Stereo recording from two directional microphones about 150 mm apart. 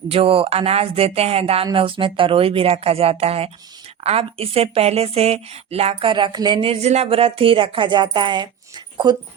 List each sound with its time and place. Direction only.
0.1 s a woman's voice: 40° right (ahead or behind)